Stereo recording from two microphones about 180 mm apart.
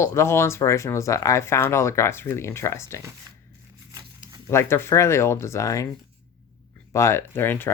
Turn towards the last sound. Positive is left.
turn(degrees=10)  # may be behind; listen again after turning